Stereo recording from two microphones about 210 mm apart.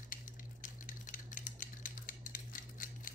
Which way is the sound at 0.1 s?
40° left (ahead or behind).